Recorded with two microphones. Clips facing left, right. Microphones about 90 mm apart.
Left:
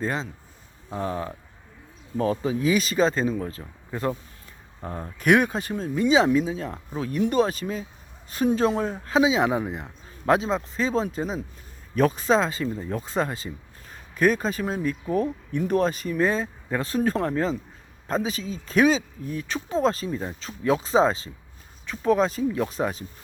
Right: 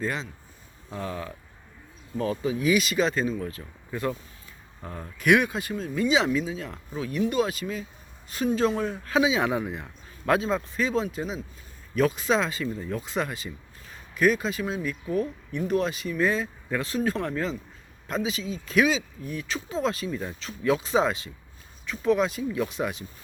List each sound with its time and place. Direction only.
0.0 s a man's voice: 35° left (ahead or behind)